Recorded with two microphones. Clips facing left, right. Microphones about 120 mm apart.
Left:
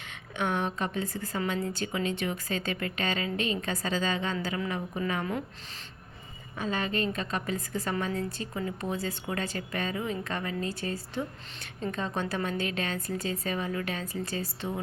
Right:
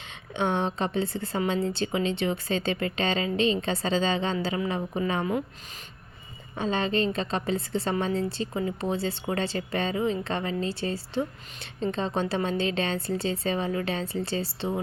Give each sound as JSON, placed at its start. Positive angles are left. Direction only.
{"t": 0.1, "sound": "a woman's voice", "side_deg": -25}
{"t": 6.6, "sound": "a woman's voice", "side_deg": -25}